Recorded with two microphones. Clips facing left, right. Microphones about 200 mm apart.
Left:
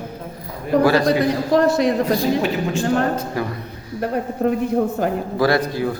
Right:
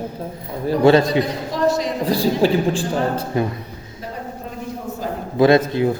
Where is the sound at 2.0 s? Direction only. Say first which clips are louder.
Right 1 dB; 30° right (ahead or behind).